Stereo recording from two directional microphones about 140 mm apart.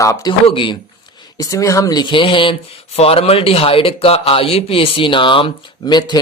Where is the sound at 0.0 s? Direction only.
25° left (ahead or behind).